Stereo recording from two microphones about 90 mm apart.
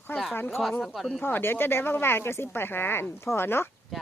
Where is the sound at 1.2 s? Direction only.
25° left (ahead or behind).